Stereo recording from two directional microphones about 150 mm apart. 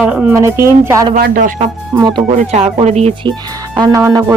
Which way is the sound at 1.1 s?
70° right (ahead or behind).